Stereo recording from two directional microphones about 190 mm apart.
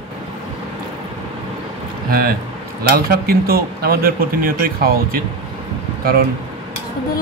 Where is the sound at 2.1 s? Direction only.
50° right (ahead or behind).